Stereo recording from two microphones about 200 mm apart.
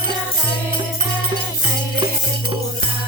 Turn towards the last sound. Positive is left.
turn(degrees=-20)  # may be behind; listen again after turning